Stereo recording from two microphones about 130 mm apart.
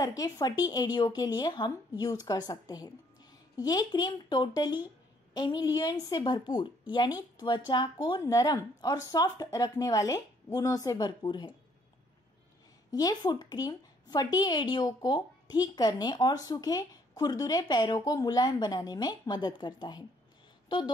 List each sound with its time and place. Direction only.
0.0 s speech: 30° left (ahead or behind)
12.9 s speech: 30° left (ahead or behind)